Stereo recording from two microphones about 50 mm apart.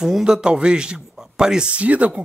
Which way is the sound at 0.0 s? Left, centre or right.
Centre.